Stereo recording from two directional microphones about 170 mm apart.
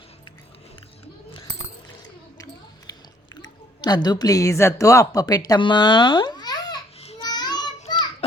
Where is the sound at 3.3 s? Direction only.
25° left (ahead or behind).